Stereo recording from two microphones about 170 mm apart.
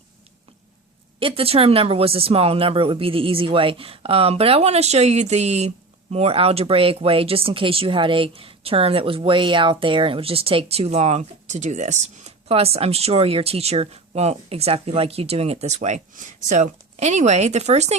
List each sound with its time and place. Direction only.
1.2 s speech: 35° right (ahead or behind)